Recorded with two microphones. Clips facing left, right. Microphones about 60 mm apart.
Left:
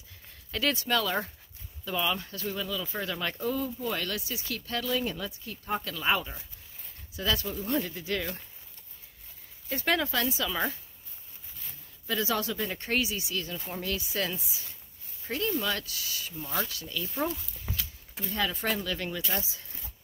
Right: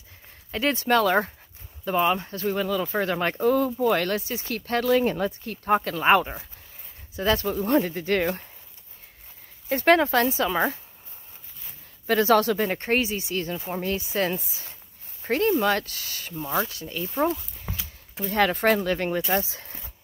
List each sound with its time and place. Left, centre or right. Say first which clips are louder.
0.5 s speech: right 4 dB; right
0.8 s speech: right 8 dB; right
4.1 s speech: right 7 dB; right
9.7 s speech: right 9 dB; right
12.1 s speech: right 10 dB; right
16.6 s speech: right 4 dB; right
18.2 s speech: right 9 dB; right